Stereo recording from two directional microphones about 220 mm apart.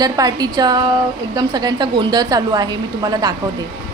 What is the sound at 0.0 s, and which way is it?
A woman's voice, 15° right (ahead or behind).